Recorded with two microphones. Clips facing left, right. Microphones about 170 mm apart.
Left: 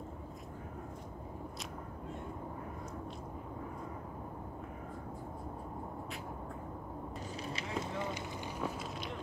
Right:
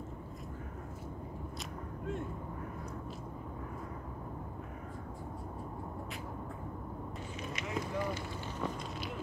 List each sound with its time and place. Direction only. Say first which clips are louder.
7.4 s vehicle: right 2 dB; 25° left (ahead or behind)